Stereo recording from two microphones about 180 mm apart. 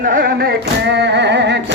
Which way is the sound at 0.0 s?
50° right (ahead or behind).